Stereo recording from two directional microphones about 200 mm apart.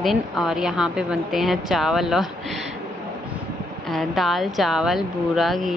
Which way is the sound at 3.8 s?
Centre (ahead or behind).